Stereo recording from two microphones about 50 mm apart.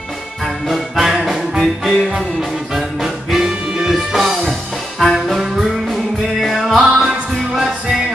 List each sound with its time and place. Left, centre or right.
0.7 s music: centre
4.5 s music: centre